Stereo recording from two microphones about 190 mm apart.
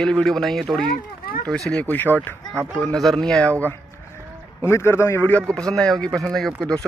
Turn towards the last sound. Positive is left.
turn(degrees=5)  # may be behind; listen again after turning